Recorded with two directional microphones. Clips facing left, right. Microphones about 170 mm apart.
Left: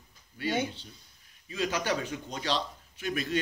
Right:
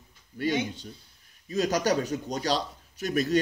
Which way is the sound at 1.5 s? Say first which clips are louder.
Right 5 dB; 40° right (ahead or behind).